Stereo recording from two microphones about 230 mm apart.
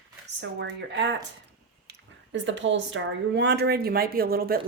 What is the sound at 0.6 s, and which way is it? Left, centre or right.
A woman's voice, right.